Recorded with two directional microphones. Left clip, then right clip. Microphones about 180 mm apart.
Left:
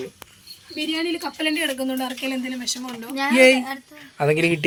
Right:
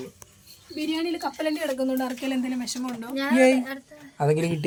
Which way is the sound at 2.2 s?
60° right (ahead or behind).